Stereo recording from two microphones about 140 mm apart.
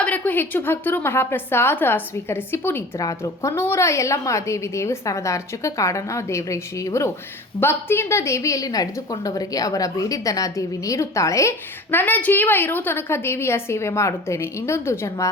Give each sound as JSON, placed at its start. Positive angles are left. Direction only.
{"t": 0.0, "sound": "a woman's voice", "side_deg": 10}